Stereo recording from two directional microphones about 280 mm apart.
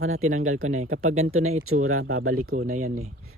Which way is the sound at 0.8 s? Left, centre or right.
Right.